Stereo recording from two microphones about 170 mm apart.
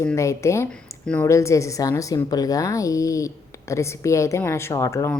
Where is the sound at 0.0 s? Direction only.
15° left (ahead or behind).